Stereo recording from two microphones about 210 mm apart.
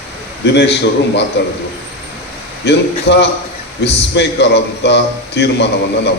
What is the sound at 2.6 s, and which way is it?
A man's voice, 55° left (ahead or behind).